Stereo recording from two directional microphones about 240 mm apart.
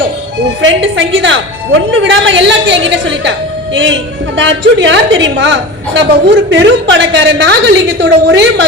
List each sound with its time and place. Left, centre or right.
0.6 s a woman's voice: right